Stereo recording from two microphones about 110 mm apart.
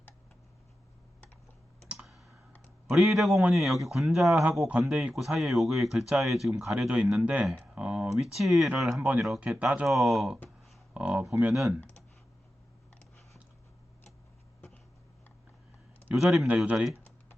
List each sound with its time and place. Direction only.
1.9 s clicking: 5° right (ahead or behind)
2.9 s speech: centre (ahead or behind)
9.6 s speech: 10° right (ahead or behind)
9.8 s speech: centre (ahead or behind)
16.1 s speech: centre (ahead or behind)